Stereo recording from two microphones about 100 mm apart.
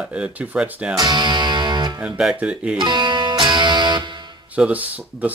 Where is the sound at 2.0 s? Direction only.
5° right (ahead or behind).